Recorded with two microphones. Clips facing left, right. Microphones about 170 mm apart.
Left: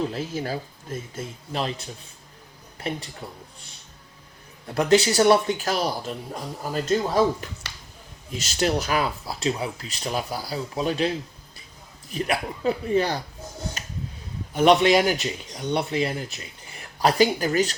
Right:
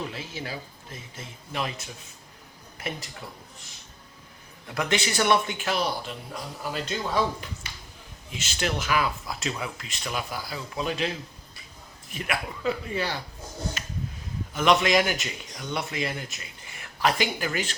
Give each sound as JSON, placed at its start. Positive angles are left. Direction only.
{"t": 0.1, "sound": "speech", "side_deg": 40}
{"t": 3.2, "sound": "a man's voice", "side_deg": 25}
{"t": 4.7, "sound": "speech", "side_deg": 35}
{"t": 12.1, "sound": "speech", "side_deg": 35}
{"t": 13.8, "sound": "a sound", "side_deg": 40}
{"t": 14.5, "sound": "speech", "side_deg": 35}